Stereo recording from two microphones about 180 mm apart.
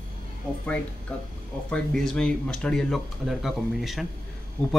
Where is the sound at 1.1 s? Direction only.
10° left (ahead or behind).